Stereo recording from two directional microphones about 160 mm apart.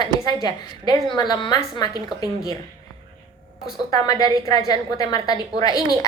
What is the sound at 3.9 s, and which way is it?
A woman's voice, 25° left (ahead or behind).